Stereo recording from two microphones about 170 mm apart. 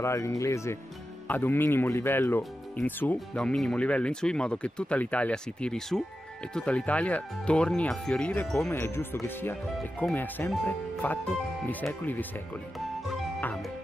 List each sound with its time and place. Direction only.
0.0 s speech: 15° left (ahead or behind)